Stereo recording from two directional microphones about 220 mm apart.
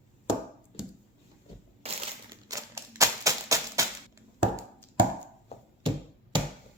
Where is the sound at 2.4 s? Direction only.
15° right (ahead or behind).